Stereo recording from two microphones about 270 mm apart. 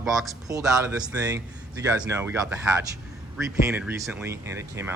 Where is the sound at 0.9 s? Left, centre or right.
Centre.